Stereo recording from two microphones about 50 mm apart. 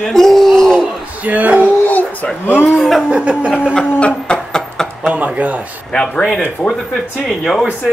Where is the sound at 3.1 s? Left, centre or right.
Right.